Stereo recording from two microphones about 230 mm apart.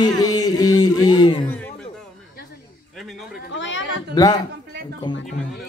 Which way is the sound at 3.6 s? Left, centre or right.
Left.